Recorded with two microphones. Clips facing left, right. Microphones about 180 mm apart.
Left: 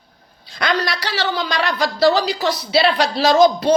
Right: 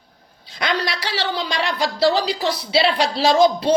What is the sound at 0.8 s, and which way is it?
Speech, 25° right (ahead or behind).